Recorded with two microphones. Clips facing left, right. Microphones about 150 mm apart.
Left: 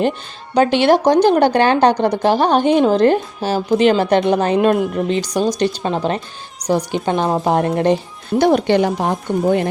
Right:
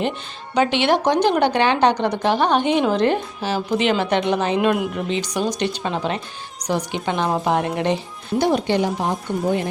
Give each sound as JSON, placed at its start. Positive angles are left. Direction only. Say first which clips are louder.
{"t": 0.5, "sound": "speech", "louder": "left 5 dB", "side_deg": 40}
{"t": 8.4, "sound": "a woman's voice", "louder": "left 5 dB", "side_deg": 60}